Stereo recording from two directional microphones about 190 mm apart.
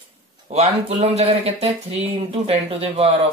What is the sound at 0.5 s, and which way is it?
Speech, 35° right (ahead or behind).